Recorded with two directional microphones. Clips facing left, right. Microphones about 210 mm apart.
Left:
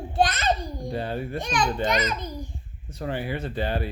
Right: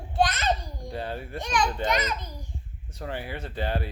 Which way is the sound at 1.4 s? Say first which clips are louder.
Even; 30° left (ahead or behind).